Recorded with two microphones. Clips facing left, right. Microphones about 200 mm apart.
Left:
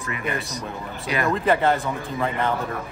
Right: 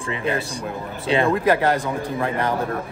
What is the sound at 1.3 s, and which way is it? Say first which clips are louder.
Speech: right 2 dB; 10° right (ahead or behind).